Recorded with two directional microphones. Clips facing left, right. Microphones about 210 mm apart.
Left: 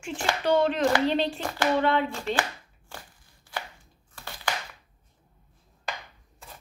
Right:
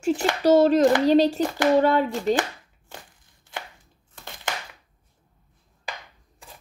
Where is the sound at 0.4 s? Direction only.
40° right (ahead or behind).